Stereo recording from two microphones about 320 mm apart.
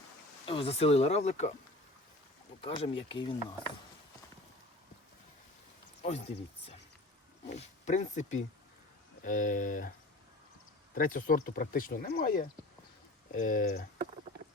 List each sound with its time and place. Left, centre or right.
0.4 s speech: centre
2.6 s speech: centre
6.0 s speech: centre
10.9 s speech: left